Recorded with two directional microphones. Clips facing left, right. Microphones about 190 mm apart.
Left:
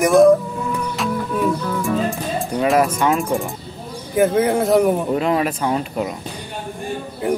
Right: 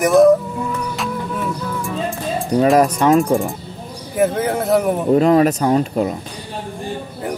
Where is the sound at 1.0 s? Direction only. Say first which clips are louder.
Left 3 dB; centre (ahead or behind).